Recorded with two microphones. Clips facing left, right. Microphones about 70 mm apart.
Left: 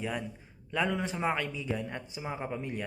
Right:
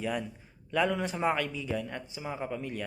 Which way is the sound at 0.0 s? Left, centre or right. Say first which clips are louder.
Right 2 dB; centre.